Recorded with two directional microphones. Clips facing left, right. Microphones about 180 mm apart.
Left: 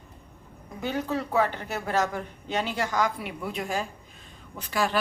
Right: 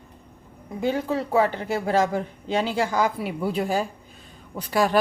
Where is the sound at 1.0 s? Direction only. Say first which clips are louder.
Right 2 dB; 30° right (ahead or behind).